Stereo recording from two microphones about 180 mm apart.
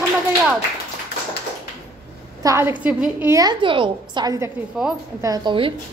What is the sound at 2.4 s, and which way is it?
A woman's voice, 15° right (ahead or behind).